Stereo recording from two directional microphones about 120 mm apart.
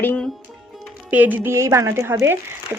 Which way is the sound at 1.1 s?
15° right (ahead or behind).